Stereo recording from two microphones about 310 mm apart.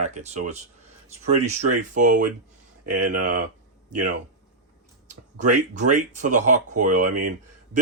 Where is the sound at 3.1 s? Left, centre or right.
Right.